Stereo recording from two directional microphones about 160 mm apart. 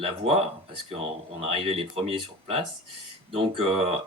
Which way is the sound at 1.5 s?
35° right (ahead or behind).